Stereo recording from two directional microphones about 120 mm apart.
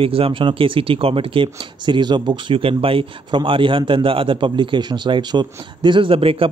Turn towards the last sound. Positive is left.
turn(degrees=-50)  # may be behind; listen again after turning